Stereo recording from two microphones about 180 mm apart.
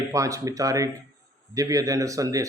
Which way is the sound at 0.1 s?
20° right (ahead or behind).